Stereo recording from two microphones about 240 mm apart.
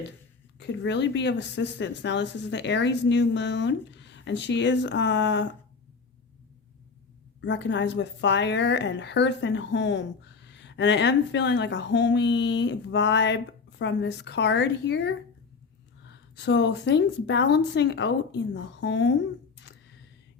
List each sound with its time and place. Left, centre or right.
0.6 s a woman's voice: left
7.4 s a woman's voice: left